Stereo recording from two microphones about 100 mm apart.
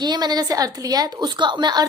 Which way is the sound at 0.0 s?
45° right (ahead or behind).